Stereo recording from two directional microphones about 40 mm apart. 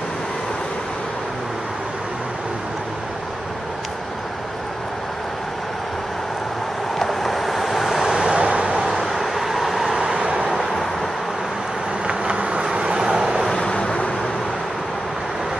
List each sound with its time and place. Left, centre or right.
7.0 s vehicle: centre
8.0 s vehicle: centre
8.7 s vehicle: centre
10.0 s vehicle: centre
10.6 s vehicle: centre
12.1 s insect: right
12.7 s vehicle: right
13.4 s vehicle: centre
13.7 s vehicle: left